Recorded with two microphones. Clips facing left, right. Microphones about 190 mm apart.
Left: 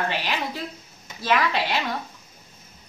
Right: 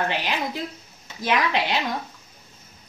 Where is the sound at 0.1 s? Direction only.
15° right (ahead or behind).